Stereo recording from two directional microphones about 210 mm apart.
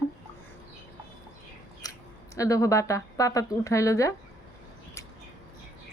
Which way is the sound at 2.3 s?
15° left (ahead or behind).